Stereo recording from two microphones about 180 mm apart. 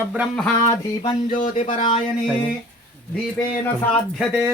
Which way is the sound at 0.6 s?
20° left (ahead or behind).